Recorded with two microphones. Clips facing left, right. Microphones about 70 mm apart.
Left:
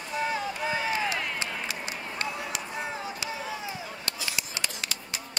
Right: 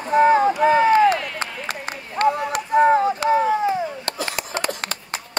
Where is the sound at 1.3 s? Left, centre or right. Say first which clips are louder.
Right 5 dB; right.